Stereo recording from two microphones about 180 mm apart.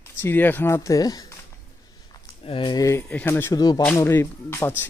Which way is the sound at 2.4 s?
30° left (ahead or behind).